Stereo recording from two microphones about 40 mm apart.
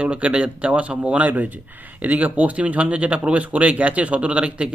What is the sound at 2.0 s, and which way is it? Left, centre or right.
Speech, right.